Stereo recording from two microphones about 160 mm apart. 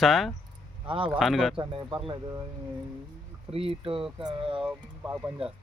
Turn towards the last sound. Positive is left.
turn(degrees=-10)  # may be behind; listen again after turning